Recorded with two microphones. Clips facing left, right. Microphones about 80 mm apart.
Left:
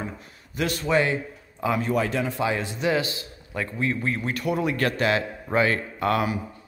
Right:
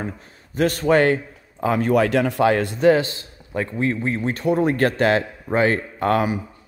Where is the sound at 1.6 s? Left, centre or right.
Right.